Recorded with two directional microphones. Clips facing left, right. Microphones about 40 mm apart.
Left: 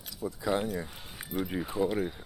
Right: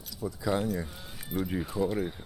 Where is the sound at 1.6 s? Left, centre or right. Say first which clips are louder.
Even; left.